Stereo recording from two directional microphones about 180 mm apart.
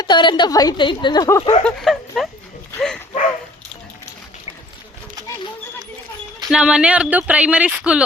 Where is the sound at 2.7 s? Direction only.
5° left (ahead or behind).